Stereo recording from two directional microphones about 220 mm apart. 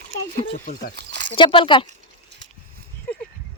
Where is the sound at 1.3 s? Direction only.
25° left (ahead or behind).